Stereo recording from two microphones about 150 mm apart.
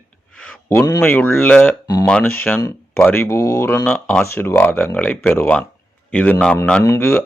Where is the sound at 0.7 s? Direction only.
20° left (ahead or behind).